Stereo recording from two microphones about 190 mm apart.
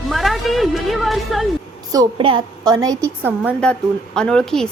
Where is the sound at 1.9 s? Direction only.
25° right (ahead or behind).